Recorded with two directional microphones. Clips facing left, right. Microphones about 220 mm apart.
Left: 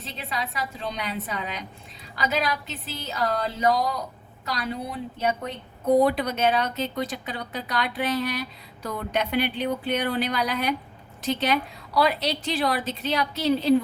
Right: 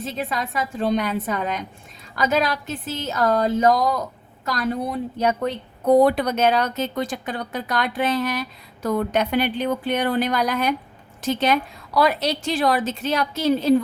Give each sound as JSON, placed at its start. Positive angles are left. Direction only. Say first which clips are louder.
{"t": 0.0, "sound": "speech", "louder": "right 6 dB", "side_deg": -50}